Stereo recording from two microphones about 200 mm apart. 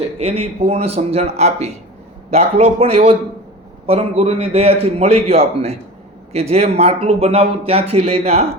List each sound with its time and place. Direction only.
0.2 s speech: 30° right (ahead or behind)